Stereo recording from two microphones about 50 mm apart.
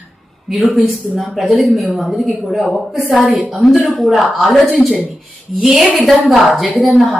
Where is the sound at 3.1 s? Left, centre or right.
Centre.